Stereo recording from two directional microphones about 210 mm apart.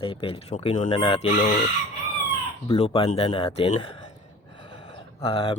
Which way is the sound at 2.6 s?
25° left (ahead or behind).